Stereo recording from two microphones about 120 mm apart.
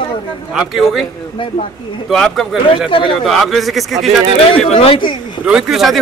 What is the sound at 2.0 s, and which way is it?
Speech, 5° left (ahead or behind).